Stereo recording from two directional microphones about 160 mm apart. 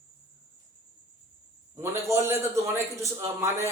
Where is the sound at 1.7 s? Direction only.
15° right (ahead or behind).